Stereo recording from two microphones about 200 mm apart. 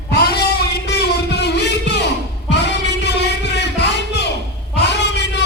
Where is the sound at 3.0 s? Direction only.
60° left (ahead or behind).